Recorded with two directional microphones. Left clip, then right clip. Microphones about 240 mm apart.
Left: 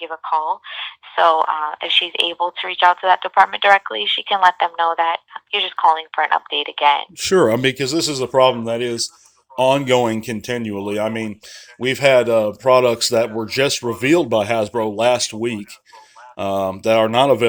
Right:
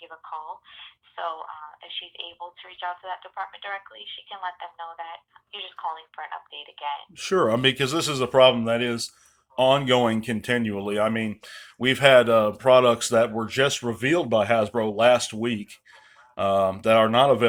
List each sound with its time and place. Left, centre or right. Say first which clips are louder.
0.0 s speech: left 16 dB; left
7.2 s speech: left 6 dB; left